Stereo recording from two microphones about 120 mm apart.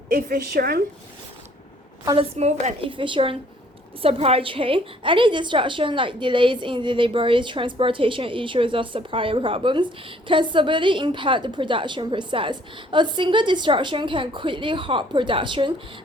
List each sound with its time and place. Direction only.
2.1 s a woman's voice: 65° right (ahead or behind)
2.9 s a woman's voice: 45° right (ahead or behind)